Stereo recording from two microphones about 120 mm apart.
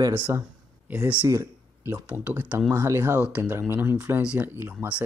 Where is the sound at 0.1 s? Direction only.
20° right (ahead or behind).